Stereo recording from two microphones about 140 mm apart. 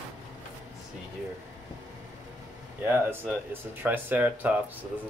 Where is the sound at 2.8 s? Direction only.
15° right (ahead or behind).